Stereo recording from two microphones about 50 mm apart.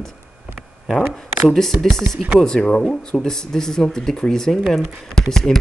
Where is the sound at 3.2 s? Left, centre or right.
Centre.